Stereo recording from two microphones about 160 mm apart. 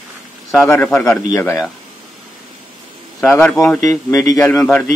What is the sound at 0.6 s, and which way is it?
Speech, 15° left (ahead or behind).